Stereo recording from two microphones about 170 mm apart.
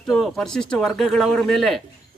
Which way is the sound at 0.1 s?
Centre (ahead or behind).